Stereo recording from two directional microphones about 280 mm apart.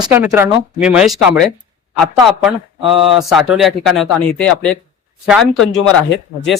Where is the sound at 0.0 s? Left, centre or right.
Centre.